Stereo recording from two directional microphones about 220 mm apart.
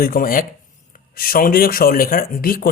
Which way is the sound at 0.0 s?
40° left (ahead or behind).